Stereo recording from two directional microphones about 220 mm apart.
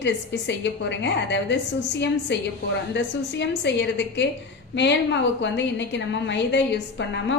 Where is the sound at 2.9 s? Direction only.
50° left (ahead or behind).